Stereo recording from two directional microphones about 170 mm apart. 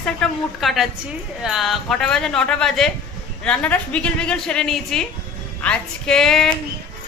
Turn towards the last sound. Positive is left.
turn(degrees=5)  # may be behind; listen again after turning